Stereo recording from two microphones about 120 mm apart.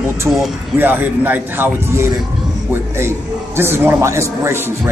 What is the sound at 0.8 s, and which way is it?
A man's voice, 15° right (ahead or behind).